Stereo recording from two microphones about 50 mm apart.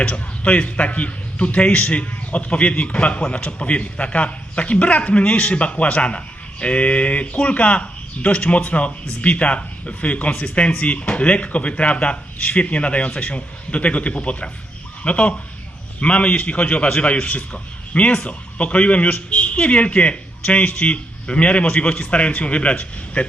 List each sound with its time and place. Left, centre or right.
0.0 s a man's voice: left